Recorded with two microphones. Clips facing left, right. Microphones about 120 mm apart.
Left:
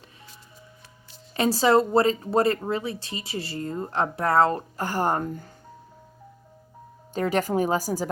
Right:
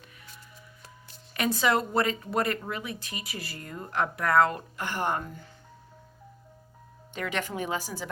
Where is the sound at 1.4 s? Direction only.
30° left (ahead or behind).